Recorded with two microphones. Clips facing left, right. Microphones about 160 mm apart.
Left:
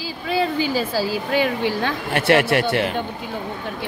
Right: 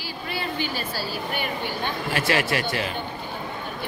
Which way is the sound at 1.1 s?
90° left.